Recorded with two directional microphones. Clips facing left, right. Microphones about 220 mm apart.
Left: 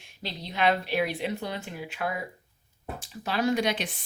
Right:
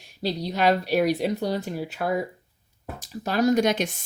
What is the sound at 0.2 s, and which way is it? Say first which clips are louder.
Speech: right 5 dB; 40° right (ahead or behind).